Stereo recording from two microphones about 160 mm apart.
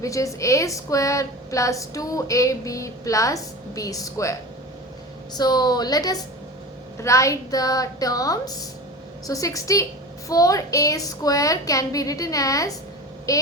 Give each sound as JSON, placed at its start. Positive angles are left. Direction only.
{"t": 0.0, "sound": "a woman's voice", "side_deg": 20}
{"t": 5.4, "sound": "a woman's voice", "side_deg": 25}